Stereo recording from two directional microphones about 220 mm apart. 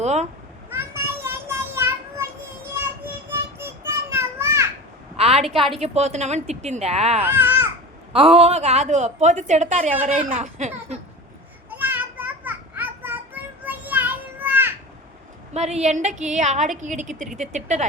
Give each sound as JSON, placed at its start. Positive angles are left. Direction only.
{"t": 0.0, "sound": "speech", "side_deg": -30}
{"t": 0.7, "sound": "child singing", "side_deg": -10}
{"t": 4.1, "sound": "children playing", "side_deg": -10}
{"t": 5.1, "sound": "a sound", "side_deg": -25}
{"t": 5.8, "sound": "speech", "side_deg": -30}
{"t": 7.3, "sound": "babbling", "side_deg": -10}
{"t": 8.1, "sound": "a woman's voice", "side_deg": -25}
{"t": 11.7, "sound": "children playing", "side_deg": -10}
{"t": 15.5, "sound": "a woman's voice", "side_deg": -30}